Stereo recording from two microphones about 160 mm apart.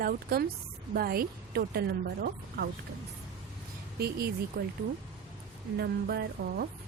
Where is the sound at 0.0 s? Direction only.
70° right (ahead or behind).